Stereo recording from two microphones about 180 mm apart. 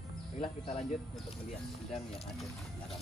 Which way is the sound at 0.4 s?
35° left (ahead or behind).